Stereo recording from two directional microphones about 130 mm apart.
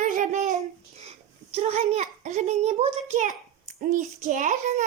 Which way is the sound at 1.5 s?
50° right (ahead or behind).